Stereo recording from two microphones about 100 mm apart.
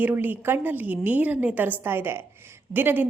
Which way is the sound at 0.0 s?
20° right (ahead or behind).